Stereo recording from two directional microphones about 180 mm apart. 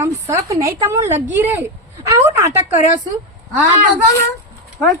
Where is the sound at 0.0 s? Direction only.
15° right (ahead or behind).